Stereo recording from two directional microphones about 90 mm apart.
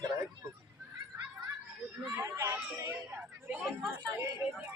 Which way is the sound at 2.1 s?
25° right (ahead or behind).